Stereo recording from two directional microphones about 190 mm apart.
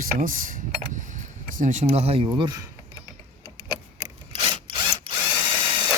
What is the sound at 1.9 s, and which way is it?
Speech, 30° right (ahead or behind).